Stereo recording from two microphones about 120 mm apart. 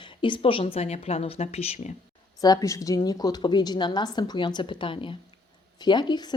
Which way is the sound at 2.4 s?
30° left (ahead or behind).